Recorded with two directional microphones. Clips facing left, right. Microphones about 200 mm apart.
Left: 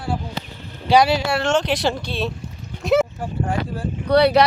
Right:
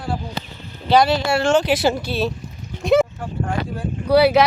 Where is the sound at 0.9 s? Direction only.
10° left (ahead or behind).